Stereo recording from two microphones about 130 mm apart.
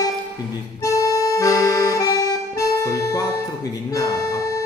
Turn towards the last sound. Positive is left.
turn(degrees=25)  # may be behind; listen again after turning